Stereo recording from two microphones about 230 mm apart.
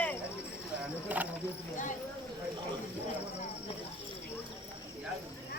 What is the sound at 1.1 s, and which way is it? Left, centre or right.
Cricket, centre.